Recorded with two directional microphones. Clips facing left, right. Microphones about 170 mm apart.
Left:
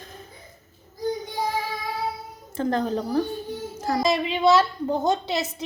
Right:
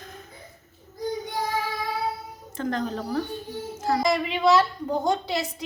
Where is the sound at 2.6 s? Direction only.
30° left (ahead or behind).